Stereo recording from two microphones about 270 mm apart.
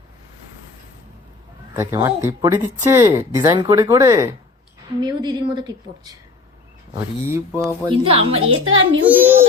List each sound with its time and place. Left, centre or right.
1.7 s speech: centre
7.9 s a woman's voice: right
8.4 s a woman's voice: right